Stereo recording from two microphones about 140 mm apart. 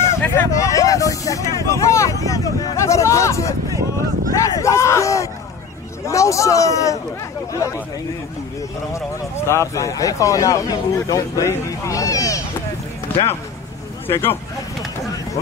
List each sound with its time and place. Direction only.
0.0 s speech: 20° left (ahead or behind)
9.5 s speech: 20° left (ahead or behind)
13.1 s basketball bounce: 15° left (ahead or behind)
14.0 s speech: 15° left (ahead or behind)